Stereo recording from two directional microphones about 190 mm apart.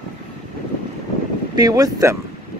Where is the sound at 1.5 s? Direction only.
20° right (ahead or behind).